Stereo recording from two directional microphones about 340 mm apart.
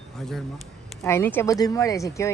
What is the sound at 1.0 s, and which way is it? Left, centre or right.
Speech, centre.